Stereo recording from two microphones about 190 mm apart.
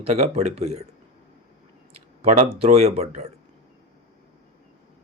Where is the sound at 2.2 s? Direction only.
35° right (ahead or behind).